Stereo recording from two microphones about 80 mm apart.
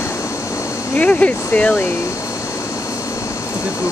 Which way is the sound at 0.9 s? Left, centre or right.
Centre.